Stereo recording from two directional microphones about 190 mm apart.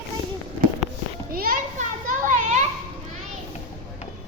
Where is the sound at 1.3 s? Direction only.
50° right (ahead or behind).